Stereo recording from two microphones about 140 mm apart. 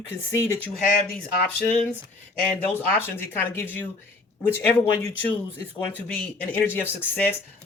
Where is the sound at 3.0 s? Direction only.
15° left (ahead or behind).